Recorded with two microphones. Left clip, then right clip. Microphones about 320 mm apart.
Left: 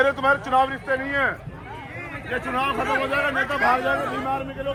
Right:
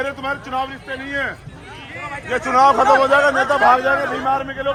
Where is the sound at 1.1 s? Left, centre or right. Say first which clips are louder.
Right 1 dB; centre.